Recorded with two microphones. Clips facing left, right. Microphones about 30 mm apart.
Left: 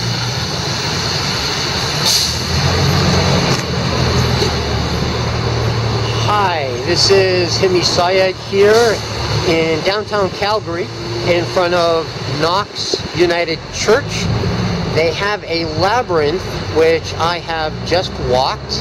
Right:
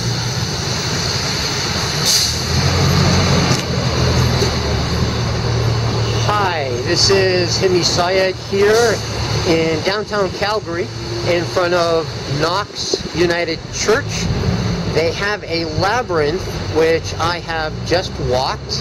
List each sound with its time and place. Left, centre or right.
0.8 s vehicle: left
5.9 s speech: centre